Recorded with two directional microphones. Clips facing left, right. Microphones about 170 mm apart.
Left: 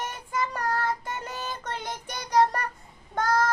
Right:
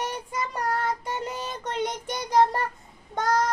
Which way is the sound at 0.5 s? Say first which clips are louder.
Right 1 dB; 20° right (ahead or behind).